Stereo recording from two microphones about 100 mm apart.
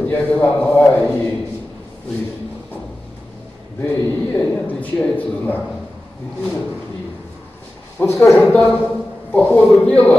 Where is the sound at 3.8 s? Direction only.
20° left (ahead or behind).